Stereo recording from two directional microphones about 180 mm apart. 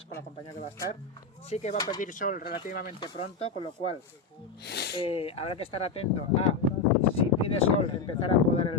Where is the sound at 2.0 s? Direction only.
45° left (ahead or behind).